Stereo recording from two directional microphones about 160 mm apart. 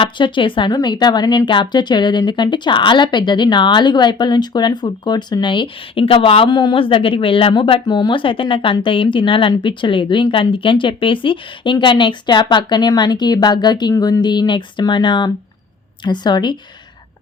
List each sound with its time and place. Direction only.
0.0 s speech: 30° left (ahead or behind)